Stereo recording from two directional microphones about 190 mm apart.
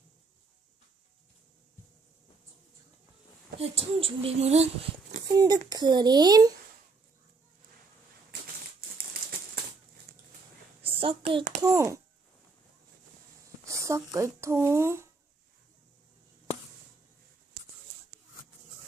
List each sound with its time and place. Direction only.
3.6 s speech: 30° right (ahead or behind)
5.3 s a child's voice: 20° right (ahead or behind)
10.1 s a sound: 50° right (ahead or behind)
10.8 s a sound: 30° right (ahead or behind)
11.6 s speech: 15° right (ahead or behind)
13.7 s speech: 15° right (ahead or behind)